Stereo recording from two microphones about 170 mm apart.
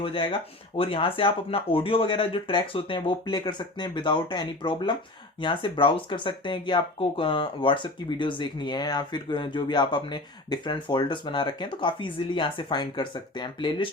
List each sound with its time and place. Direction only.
0.0 s speech: 30° left (ahead or behind)